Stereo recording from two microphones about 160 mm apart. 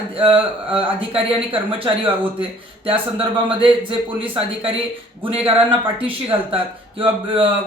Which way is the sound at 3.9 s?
35° right (ahead or behind).